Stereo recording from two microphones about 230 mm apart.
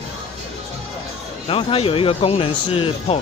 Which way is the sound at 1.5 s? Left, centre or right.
Left.